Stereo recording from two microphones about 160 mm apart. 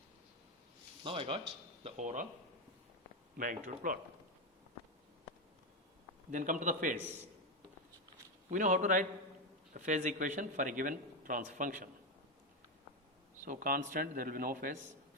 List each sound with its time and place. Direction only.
1.0 s speech: 35° right (ahead or behind)
1.8 s a man's voice: 50° right (ahead or behind)
3.3 s a man's voice: 55° right (ahead or behind)
6.3 s a man's voice: 55° right (ahead or behind)
8.4 s a man's voice: 50° right (ahead or behind)
13.4 s a man's voice: 55° right (ahead or behind)